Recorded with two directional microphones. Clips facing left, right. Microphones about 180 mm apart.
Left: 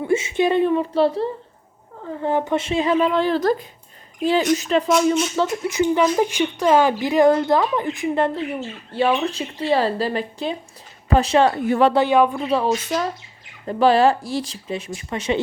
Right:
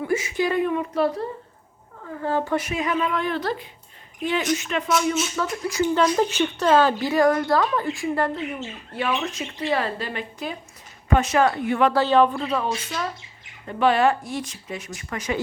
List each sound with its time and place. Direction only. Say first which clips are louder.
0.0 s a woman's voice: left 4 dB; 25° left (ahead or behind)
3.4 s speech: left 8 dB; 40° left (ahead or behind)
5.4 s a woman's voice: left 4 dB; 20° left (ahead or behind)
11.9 s speech: left 2 dB; 10° left (ahead or behind)
12.5 s speech: left 6 dB; 30° left (ahead or behind)